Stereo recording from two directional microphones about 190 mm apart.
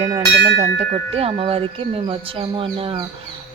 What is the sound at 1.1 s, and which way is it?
A woman's voice, 30° right (ahead or behind).